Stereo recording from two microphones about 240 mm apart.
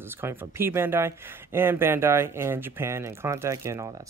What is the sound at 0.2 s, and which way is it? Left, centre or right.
Speech, centre.